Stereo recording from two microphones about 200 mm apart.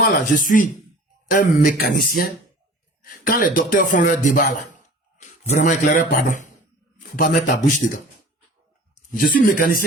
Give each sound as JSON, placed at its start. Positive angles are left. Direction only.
{"t": 0.3, "sound": "a man's voice", "side_deg": 40}
{"t": 9.1, "sound": "speech", "side_deg": 45}